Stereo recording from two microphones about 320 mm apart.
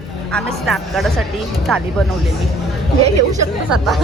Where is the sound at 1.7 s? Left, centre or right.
Centre.